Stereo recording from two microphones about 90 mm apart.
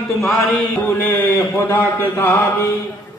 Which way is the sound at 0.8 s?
25° left (ahead or behind).